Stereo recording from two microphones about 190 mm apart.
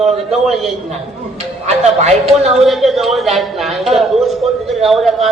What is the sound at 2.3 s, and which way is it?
Speech, centre (ahead or behind).